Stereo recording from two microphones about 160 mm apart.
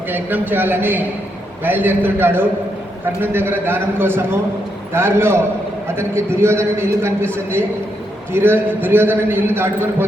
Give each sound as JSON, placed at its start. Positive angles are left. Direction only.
{"t": 0.1, "sound": "a man's voice", "side_deg": -10}